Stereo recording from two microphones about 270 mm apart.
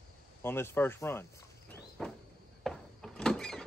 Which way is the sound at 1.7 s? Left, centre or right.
Centre.